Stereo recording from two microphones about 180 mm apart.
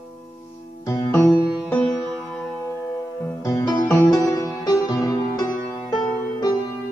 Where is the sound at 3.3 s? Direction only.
20° left (ahead or behind).